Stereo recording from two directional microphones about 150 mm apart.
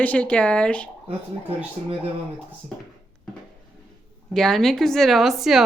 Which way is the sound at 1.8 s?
50° right (ahead or behind).